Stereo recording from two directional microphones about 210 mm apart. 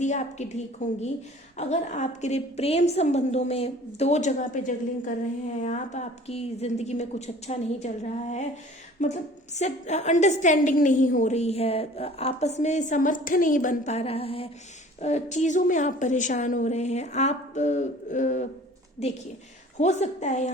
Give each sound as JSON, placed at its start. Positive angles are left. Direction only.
{"t": 0.0, "sound": "a woman's voice", "side_deg": 35}